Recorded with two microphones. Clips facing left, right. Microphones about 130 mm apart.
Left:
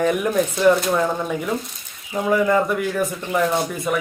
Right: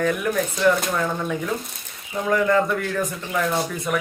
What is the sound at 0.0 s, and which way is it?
Speech, 20° left (ahead or behind).